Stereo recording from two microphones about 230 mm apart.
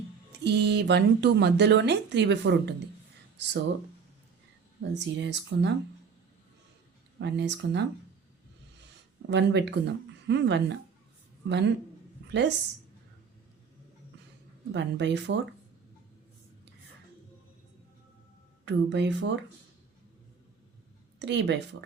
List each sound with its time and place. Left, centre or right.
0.4 s speech: right
4.8 s speech: right
7.2 s speech: right
9.2 s speech: right
14.7 s speech: right
18.6 s speech: right
21.2 s speech: right